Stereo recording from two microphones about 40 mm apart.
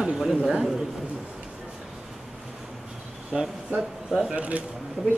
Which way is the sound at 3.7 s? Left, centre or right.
Right.